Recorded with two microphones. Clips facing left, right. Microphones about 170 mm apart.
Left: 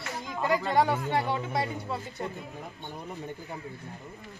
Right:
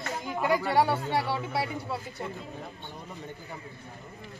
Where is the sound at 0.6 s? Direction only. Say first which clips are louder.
Even; 20° left (ahead or behind).